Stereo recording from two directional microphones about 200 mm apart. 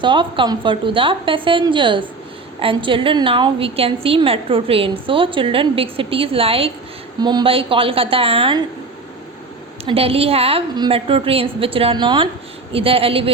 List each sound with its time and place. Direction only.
0.0 s a woman's voice: 25° right (ahead or behind)
9.8 s a woman's voice: 30° right (ahead or behind)